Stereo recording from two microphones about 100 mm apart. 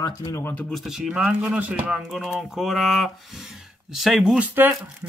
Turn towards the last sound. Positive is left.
turn(degrees=-15)  # may be behind; listen again after turning